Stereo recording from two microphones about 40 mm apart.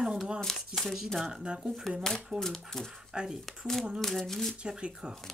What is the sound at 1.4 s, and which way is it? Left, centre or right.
Speech, centre.